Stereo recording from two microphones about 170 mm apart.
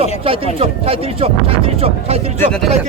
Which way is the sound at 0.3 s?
35° right (ahead or behind).